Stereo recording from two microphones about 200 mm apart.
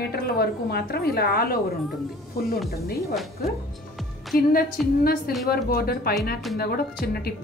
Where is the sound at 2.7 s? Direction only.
50° left (ahead or behind).